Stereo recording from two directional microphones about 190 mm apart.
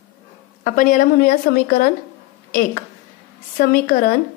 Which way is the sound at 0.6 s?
45° left (ahead or behind).